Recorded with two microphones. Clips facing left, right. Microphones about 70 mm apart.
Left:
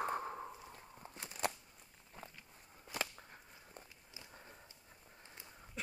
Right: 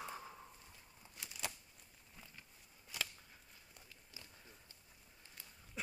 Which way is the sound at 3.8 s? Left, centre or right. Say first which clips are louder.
Left 2 dB; centre.